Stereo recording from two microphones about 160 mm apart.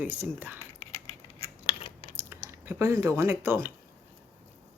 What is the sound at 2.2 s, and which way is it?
Speech, 15° right (ahead or behind).